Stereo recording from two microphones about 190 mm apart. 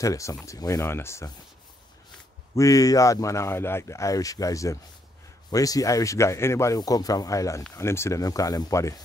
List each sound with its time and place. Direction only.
0.0 s speech: 15° left (ahead or behind)
2.5 s speech: 15° left (ahead or behind)